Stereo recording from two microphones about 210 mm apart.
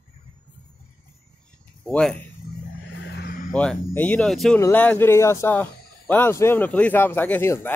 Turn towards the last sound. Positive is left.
turn(degrees=10)  # may be behind; listen again after turning